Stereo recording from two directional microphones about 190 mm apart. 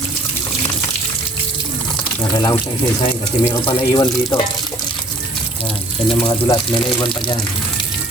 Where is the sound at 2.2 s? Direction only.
20° left (ahead or behind).